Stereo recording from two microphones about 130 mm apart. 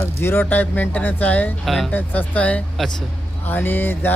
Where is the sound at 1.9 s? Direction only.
15° left (ahead or behind).